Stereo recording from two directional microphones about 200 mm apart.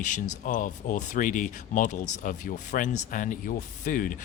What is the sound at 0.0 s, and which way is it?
Speech, 40° left (ahead or behind).